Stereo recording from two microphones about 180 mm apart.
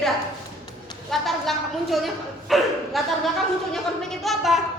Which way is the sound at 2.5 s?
Centre (ahead or behind).